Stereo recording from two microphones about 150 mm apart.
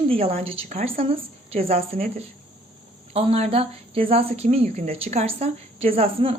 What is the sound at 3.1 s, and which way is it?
A woman's voice, 40° right (ahead or behind).